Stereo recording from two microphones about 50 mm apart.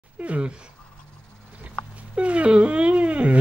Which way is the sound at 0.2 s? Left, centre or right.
Right.